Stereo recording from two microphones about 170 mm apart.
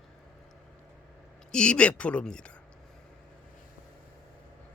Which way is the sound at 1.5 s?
5° left (ahead or behind).